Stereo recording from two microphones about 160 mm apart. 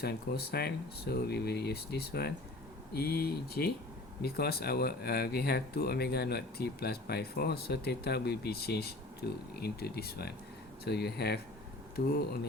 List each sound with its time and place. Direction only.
0.0 s speech: 80° left